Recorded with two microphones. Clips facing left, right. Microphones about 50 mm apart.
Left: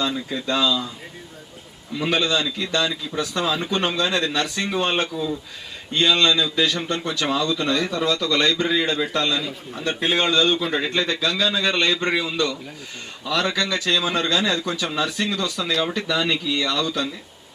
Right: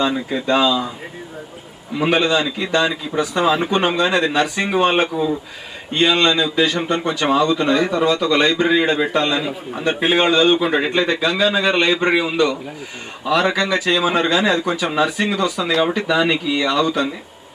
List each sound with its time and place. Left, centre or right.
0.0 s a man's voice: right
1.9 s a man's voice: right